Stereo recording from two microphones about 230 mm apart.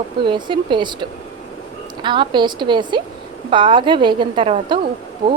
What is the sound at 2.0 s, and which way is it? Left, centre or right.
A woman's voice, centre.